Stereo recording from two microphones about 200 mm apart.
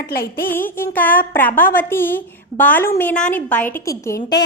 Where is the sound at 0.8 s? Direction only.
10° left (ahead or behind).